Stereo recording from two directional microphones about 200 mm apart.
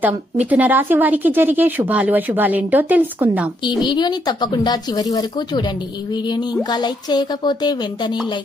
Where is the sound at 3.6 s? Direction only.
20° left (ahead or behind).